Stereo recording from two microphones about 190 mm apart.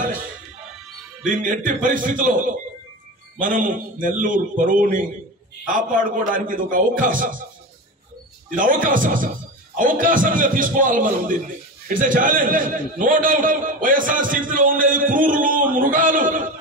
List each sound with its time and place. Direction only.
1.2 s a man's voice: 45° right (ahead or behind)
8.5 s a man's voice: 45° right (ahead or behind)